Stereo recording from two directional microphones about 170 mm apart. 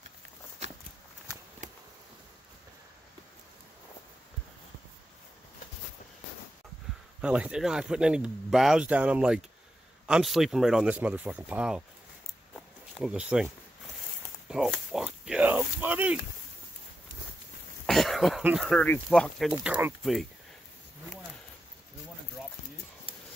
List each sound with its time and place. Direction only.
1.6 s insect: 45° right (ahead or behind)
7.2 s speech: 5° right (ahead or behind)
13.0 s speech: 5° right (ahead or behind)
14.5 s speech: centre (ahead or behind)
17.8 s cough: centre (ahead or behind)
18.4 s speech: 5° right (ahead or behind)